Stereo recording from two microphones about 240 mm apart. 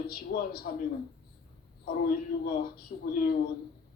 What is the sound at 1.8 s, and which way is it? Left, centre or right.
Speech, left.